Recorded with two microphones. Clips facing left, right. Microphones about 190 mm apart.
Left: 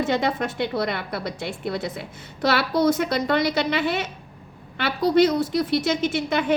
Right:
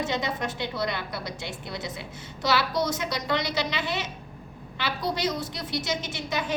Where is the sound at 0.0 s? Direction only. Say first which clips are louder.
Left 6 dB; 60° left (ahead or behind).